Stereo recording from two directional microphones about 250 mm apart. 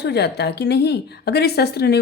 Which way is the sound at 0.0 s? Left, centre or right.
Left.